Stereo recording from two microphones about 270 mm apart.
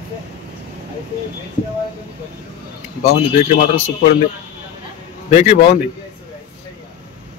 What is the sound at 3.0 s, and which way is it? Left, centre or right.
A man's voice, left.